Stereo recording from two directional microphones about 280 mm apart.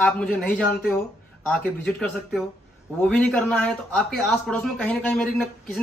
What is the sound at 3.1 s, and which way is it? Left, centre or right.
Speech, centre.